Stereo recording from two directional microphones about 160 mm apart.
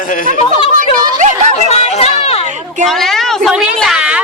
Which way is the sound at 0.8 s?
50° right (ahead or behind).